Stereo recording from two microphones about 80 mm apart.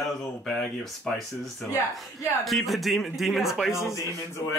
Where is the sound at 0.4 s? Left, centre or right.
Centre.